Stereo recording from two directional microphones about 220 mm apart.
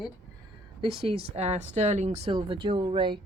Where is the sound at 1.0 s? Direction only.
25° right (ahead or behind).